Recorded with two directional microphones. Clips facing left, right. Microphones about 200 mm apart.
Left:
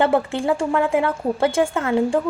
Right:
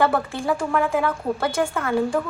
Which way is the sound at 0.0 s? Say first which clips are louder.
Left 3 dB; 25° left (ahead or behind).